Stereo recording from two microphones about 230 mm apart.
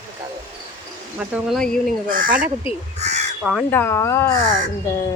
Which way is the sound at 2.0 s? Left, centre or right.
Right.